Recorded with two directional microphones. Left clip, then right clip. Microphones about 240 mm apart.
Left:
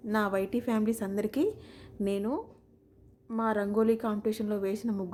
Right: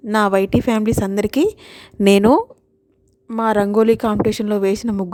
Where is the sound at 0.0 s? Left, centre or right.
Right.